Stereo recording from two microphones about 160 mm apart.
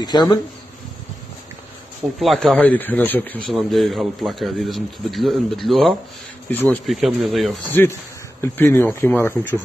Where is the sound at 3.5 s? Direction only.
Centre (ahead or behind).